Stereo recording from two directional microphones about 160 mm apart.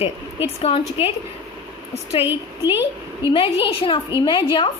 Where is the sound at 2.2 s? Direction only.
15° right (ahead or behind).